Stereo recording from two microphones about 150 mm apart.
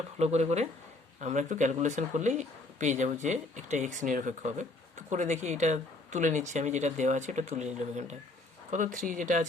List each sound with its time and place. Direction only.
0.2 s speech: 45° right (ahead or behind)